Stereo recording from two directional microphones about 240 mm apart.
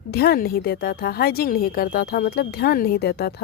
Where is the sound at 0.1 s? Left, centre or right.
Left.